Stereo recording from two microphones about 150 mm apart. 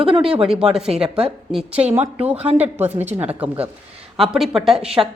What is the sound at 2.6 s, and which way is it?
A woman's voice, 10° right (ahead or behind).